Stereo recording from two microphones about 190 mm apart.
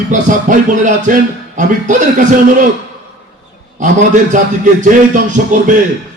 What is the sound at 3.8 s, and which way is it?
Speech, 40° right (ahead or behind).